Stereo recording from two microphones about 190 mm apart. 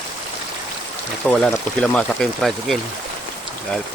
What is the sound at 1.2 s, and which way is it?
Speech, 5° left (ahead or behind).